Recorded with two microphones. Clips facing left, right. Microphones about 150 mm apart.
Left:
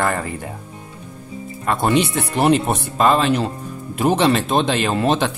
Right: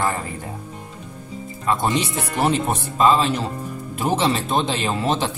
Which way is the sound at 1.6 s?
65° left (ahead or behind).